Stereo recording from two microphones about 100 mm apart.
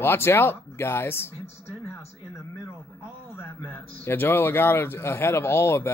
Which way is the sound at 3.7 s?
20° left (ahead or behind).